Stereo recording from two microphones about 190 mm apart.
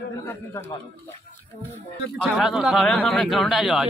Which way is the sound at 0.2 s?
15° left (ahead or behind).